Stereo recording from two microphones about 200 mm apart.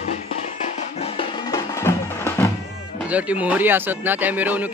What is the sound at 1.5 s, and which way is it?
Music, 15° left (ahead or behind).